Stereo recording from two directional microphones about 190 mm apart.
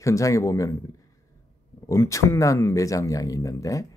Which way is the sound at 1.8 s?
15° left (ahead or behind).